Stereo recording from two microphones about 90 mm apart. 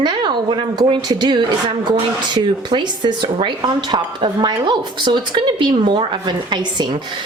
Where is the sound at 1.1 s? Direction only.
50° right (ahead or behind).